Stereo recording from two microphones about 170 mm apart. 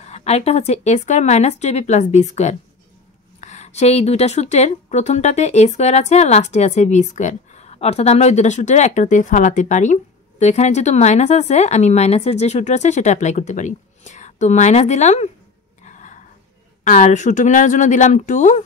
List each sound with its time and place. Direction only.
0.0 s speech: 40° left (ahead or behind)
15.8 s a sound: 45° left (ahead or behind)
16.8 s speech: 45° left (ahead or behind)